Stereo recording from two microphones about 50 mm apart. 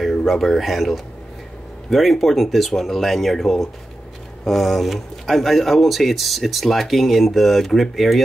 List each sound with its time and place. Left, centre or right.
0.0 s speech: centre